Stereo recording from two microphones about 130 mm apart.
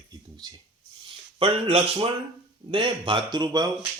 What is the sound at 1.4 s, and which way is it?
A man's voice, 45° right (ahead or behind).